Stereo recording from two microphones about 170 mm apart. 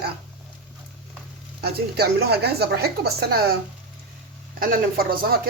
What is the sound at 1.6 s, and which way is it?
A woman's voice, 70° right (ahead or behind).